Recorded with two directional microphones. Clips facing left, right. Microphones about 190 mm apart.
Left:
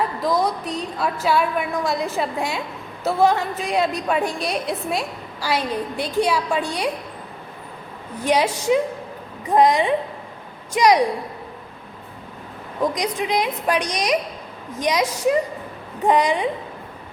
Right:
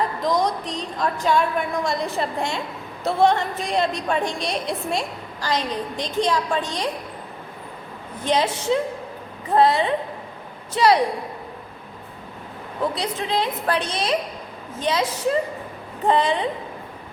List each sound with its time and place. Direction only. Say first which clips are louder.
0.2 s a woman's voice: left 1 dB; 5° left (ahead or behind)
8.2 s a woman's voice: left 2 dB; 10° left (ahead or behind)
12.8 s a woman's voice: left 3 dB; 15° left (ahead or behind)